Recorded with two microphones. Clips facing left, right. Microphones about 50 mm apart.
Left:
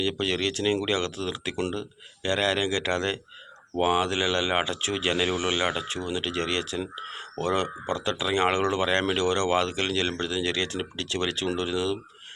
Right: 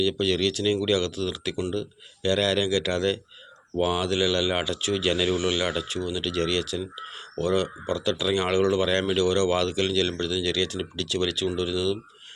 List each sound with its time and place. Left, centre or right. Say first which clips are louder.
0.0 s speech: right 3 dB; left